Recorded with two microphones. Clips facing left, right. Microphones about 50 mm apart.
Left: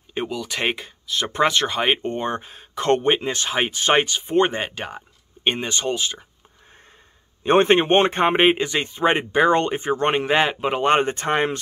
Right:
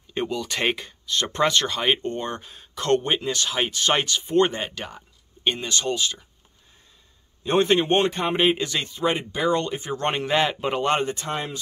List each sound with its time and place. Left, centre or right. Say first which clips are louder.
0.1 s speech: even; centre; by 6.2 s left
7.4 s speech: left 4 dB; left; by 10.8 s centre
10.8 s speech: left 6 dB; left